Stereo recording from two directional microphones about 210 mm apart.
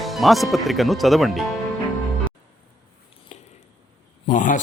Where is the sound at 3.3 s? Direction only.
30° left (ahead or behind).